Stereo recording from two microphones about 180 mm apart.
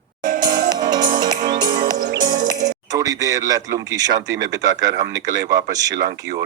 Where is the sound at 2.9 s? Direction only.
20° right (ahead or behind).